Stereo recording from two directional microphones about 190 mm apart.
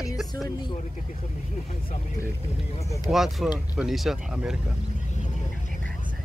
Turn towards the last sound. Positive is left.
turn(degrees=-5)  # may be behind; listen again after turning